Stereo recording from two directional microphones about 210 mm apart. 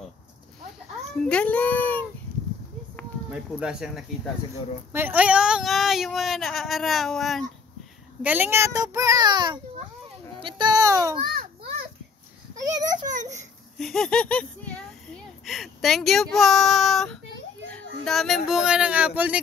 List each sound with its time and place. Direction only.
1.3 s speech: 5° left (ahead or behind)
3.3 s a child's voice: 5° right (ahead or behind)
11.2 s children playing: 45° right (ahead or behind)
13.0 s a sound: 15° right (ahead or behind)
13.7 s speech: centre (ahead or behind)
17.6 s children playing: 5° left (ahead or behind)
18.5 s speech: 5° right (ahead or behind)